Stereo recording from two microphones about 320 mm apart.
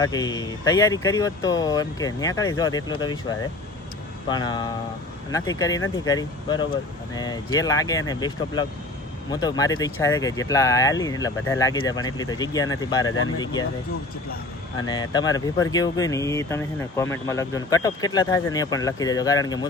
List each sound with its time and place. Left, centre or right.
0.0 s speech: centre
13.1 s speech: left
13.4 s speech: centre
14.8 s speech: centre